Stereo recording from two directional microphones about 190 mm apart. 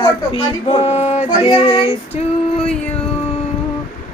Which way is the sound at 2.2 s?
35° left (ahead or behind).